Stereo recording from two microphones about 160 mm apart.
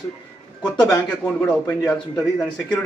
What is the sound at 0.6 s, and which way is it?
A man's voice, 5° left (ahead or behind).